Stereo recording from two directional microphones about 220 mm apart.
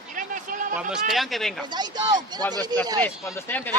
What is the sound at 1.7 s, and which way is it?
Speech, 20° right (ahead or behind).